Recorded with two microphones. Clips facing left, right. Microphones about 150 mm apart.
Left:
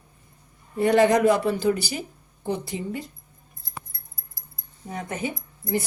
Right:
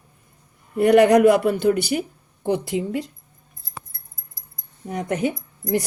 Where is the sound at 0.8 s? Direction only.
70° right (ahead or behind).